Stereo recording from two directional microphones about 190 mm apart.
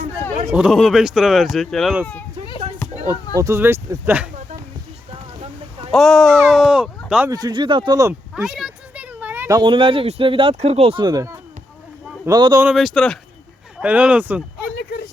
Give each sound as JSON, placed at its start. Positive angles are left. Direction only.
{"t": 0.5, "sound": "speech", "side_deg": 0}
{"t": 2.8, "sound": "a sound", "side_deg": 20}
{"t": 3.3, "sound": "speech", "side_deg": -15}
{"t": 5.9, "sound": "speech", "side_deg": 0}
{"t": 7.3, "sound": "speech", "side_deg": -20}
{"t": 8.4, "sound": "speech", "side_deg": 0}
{"t": 12.6, "sound": "speech", "side_deg": 0}